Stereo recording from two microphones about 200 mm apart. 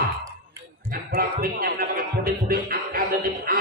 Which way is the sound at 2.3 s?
45° right (ahead or behind).